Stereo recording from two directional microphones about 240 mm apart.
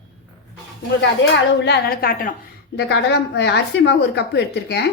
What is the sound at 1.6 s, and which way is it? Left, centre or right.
A woman's voice, left.